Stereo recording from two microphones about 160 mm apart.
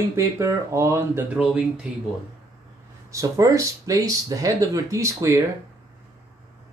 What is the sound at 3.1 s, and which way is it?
Speech, 20° right (ahead or behind).